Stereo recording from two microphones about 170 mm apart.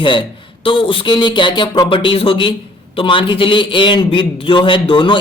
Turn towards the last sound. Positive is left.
turn(degrees=30)  # may be behind; listen again after turning